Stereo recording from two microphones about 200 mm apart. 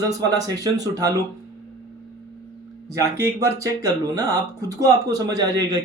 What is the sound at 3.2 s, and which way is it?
Speech, 15° right (ahead or behind).